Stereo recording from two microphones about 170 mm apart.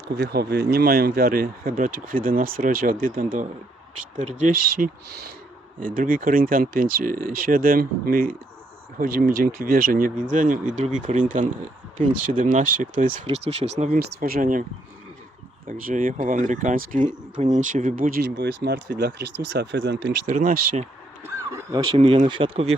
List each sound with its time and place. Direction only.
0.2 s speech: 70° right (ahead or behind); by 13.2 s 55° right (ahead or behind)
13.2 s speech: 35° right (ahead or behind)
14.0 s speech: 60° right (ahead or behind)
15.6 s speech: 55° right (ahead or behind); by 20.1 s 90° right
20.3 s speech: 50° right (ahead or behind)
21.9 s speech: 35° right (ahead or behind)